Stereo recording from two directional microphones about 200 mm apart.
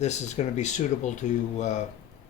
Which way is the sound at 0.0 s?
35° left (ahead or behind).